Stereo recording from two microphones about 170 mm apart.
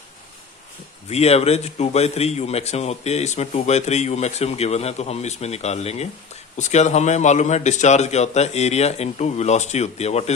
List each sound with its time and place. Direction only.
1.1 s a man's voice: 40° left (ahead or behind)